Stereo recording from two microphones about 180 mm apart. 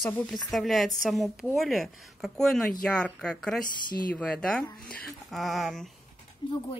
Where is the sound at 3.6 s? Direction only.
50° left (ahead or behind).